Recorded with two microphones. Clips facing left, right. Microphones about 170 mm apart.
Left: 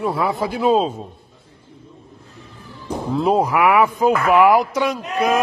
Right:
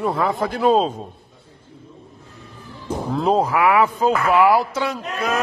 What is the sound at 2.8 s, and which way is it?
Speech, 5° left (ahead or behind).